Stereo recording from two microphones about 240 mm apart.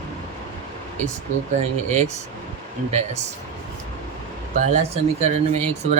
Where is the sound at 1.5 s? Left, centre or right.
Right.